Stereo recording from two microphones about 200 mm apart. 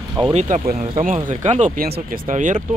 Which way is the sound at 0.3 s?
35° right (ahead or behind).